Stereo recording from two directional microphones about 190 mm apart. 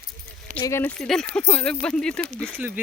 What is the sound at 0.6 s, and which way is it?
Speech, 10° left (ahead or behind).